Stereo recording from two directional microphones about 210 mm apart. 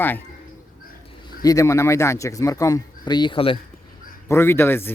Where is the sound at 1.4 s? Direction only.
15° left (ahead or behind).